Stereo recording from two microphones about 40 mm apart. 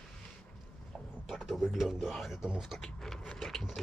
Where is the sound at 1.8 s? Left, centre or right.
Centre.